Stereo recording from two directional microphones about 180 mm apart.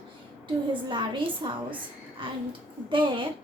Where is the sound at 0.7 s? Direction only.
25° right (ahead or behind).